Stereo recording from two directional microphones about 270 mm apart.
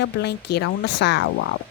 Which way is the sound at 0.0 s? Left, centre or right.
Left.